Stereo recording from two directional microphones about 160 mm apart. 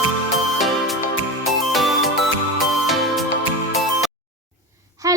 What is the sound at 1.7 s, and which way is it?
Music, centre (ahead or behind).